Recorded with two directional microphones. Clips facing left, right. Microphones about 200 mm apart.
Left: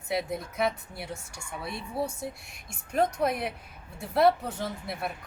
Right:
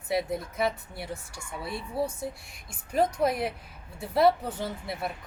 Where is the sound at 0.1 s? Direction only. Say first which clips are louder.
Right 2 dB; centre (ahead or behind).